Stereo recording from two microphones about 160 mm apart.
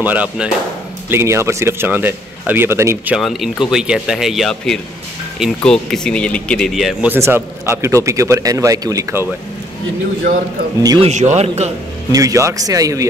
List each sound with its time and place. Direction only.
0.0 s a man's voice: 10° right (ahead or behind)
3.2 s speech: centre (ahead or behind)
7.1 s a man's voice: 15° right (ahead or behind)
11.0 s speech: 45° right (ahead or behind)
12.1 s speech: 20° right (ahead or behind)